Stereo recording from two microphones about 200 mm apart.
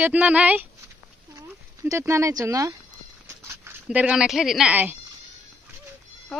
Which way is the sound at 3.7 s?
5° right (ahead or behind).